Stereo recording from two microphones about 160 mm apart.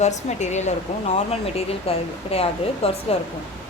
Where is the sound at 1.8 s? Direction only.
40° left (ahead or behind).